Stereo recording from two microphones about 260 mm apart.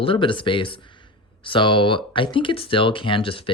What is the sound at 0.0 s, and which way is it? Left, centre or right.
Speech, centre.